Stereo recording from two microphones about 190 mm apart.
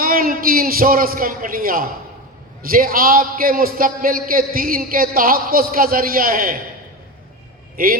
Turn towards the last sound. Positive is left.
turn(degrees=-50)  # may be behind; listen again after turning